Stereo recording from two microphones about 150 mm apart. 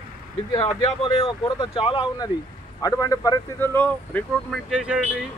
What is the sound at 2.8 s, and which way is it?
Speech, 25° left (ahead or behind).